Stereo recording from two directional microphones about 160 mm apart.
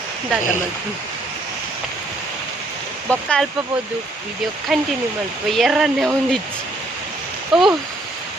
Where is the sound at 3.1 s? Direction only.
5° left (ahead or behind).